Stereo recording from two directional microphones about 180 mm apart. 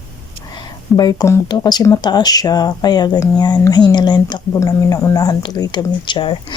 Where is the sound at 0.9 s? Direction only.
20° left (ahead or behind).